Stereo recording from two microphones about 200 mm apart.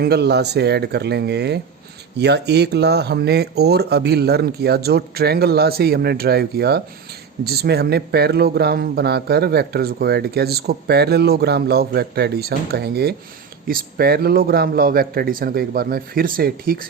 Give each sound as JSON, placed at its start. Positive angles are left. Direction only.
{"t": 0.0, "sound": "speech", "side_deg": -55}